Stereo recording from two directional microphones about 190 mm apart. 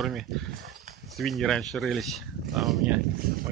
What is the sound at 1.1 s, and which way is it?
Speech, centre (ahead or behind).